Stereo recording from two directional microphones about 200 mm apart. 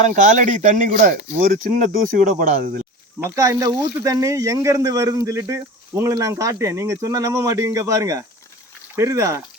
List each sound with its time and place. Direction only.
0.0 s speech: 40° right (ahead or behind)
3.2 s speech: 15° right (ahead or behind)